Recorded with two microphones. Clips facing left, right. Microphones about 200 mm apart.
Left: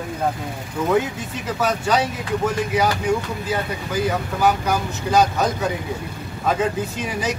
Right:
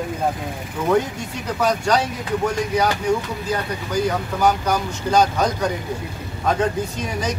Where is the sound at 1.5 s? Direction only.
5° left (ahead or behind).